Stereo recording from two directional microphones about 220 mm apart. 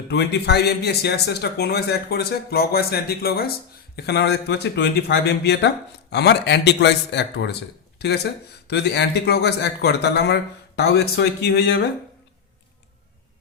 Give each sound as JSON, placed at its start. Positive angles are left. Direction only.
{"t": 0.1, "sound": "speech", "side_deg": 50}